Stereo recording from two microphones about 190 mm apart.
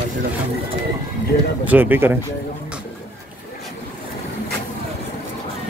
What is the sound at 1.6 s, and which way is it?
Speech, 10° right (ahead or behind).